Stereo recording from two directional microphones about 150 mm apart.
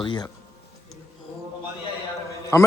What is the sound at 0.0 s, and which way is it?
Speech, 30° left (ahead or behind).